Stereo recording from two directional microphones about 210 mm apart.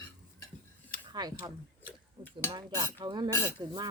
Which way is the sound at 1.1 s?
20° right (ahead or behind).